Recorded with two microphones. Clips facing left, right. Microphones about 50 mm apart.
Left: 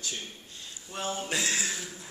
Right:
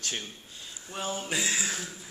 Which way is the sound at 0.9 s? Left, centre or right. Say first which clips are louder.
Even; centre.